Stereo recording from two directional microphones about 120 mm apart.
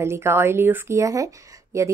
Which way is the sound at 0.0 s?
20° right (ahead or behind).